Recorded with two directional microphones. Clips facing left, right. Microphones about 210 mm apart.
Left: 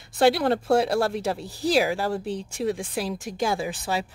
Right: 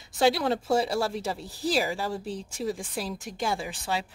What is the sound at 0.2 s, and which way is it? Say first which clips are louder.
A woman's voice: left 4 dB; centre (ahead or behind).